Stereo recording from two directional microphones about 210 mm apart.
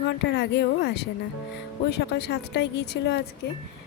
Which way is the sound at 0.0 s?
55° left (ahead or behind).